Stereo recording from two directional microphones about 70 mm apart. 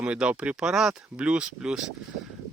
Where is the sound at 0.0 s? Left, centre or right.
Centre.